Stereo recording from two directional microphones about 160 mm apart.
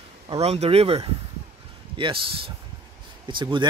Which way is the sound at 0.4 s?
40° right (ahead or behind).